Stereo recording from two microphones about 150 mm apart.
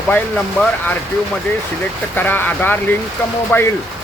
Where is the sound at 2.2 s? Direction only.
10° left (ahead or behind).